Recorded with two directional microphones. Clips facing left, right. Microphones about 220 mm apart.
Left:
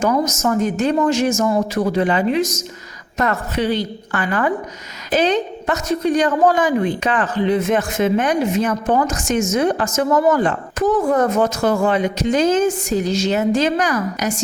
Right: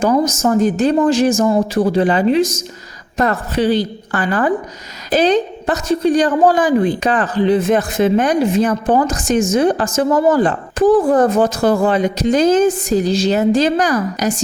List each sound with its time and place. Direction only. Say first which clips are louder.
0.0 s a woman's voice: right 3 dB; 30° right (ahead or behind)